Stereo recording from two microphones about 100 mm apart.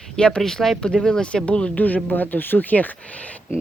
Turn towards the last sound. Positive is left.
turn(degrees=15)  # may be behind; listen again after turning